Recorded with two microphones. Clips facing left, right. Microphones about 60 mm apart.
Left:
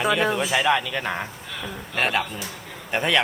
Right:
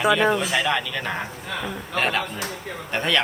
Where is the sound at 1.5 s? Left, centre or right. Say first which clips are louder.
Right 5 dB; right.